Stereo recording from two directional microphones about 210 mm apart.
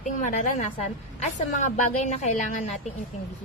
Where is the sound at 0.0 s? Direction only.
35° left (ahead or behind).